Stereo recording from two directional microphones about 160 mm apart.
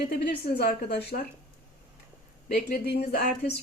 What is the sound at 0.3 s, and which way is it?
Speech, 90° left.